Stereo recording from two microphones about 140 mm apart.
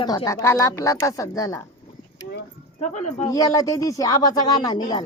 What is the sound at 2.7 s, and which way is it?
Speech, 55° left (ahead or behind).